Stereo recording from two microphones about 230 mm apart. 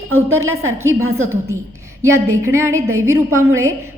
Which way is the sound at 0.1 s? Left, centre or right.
Right.